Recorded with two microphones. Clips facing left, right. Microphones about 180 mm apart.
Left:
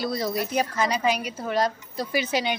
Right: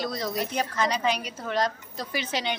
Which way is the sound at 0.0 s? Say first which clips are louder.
Left 3 dB; 5° left (ahead or behind).